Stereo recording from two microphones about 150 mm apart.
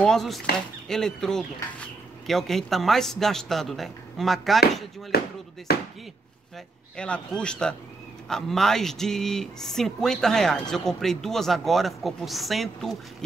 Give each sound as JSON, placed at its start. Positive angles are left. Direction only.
{"t": 0.0, "sound": "speech", "side_deg": 5}
{"t": 5.1, "sound": "speech", "side_deg": 90}
{"t": 7.0, "sound": "speech", "side_deg": 5}